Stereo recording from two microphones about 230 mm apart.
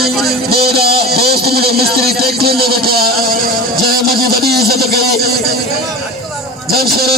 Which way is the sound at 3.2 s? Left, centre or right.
Right.